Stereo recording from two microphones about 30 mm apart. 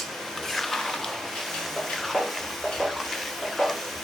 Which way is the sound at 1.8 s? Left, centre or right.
Centre.